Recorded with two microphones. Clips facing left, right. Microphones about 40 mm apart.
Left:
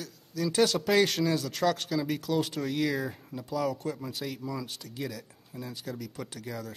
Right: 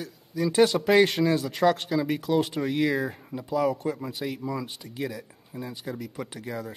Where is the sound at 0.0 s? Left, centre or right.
Centre.